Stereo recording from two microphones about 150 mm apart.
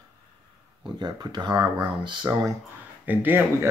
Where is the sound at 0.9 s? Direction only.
30° right (ahead or behind).